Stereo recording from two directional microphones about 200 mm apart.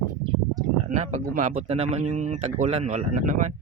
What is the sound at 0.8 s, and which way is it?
Speech, 35° right (ahead or behind).